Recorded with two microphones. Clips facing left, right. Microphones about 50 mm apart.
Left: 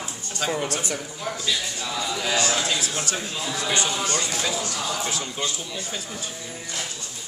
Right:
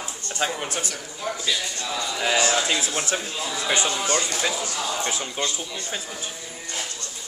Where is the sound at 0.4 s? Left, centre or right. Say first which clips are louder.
Even; right.